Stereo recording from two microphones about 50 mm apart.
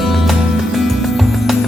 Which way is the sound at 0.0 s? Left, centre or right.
Centre.